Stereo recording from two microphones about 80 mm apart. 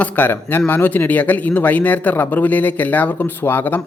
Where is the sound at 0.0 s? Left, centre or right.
Left.